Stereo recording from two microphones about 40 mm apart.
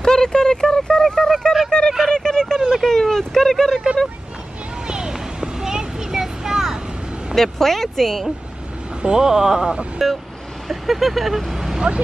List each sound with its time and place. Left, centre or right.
0.0 s a sound: centre
4.8 s a sound: right
7.3 s speech: centre
9.0 s speech: centre
10.0 s vehicle: centre
10.7 s speech: centre